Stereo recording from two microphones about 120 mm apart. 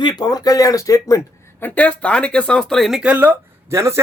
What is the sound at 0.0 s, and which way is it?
Speech, 35° left (ahead or behind).